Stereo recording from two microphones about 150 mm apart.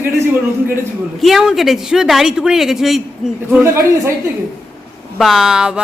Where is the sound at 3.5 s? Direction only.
15° right (ahead or behind).